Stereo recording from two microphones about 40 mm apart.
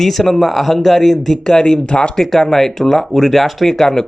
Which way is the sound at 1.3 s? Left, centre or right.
Centre.